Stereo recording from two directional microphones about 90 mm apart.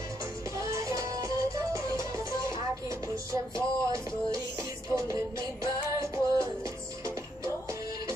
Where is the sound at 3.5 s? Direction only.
35° right (ahead or behind).